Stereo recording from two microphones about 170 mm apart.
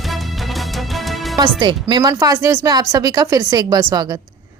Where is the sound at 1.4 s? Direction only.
25° right (ahead or behind).